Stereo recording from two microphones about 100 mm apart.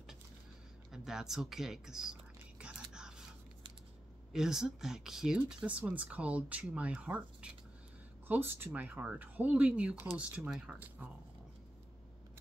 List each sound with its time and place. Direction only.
0.9 s speech: 5° right (ahead or behind)
2.6 s whispering: 5° right (ahead or behind)
4.3 s speech: 5° right (ahead or behind)